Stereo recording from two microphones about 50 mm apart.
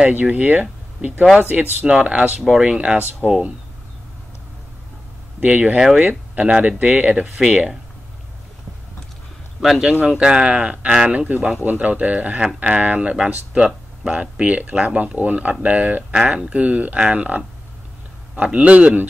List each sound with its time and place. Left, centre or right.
0.1 s speech: right
1.9 s speech: centre
3.2 s speech: centre
5.4 s speech: right
9.6 s speech: centre
10.0 s speech: centre
11.1 s speech: right